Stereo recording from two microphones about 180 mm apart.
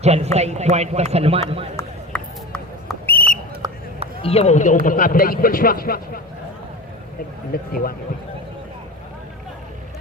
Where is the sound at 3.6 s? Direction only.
20° right (ahead or behind).